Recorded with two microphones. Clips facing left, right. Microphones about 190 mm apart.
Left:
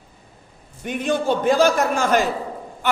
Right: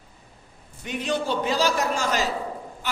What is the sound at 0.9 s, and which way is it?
A man's voice, 50° left (ahead or behind).